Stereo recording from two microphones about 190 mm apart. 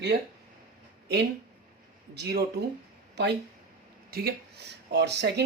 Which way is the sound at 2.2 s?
60° right (ahead or behind).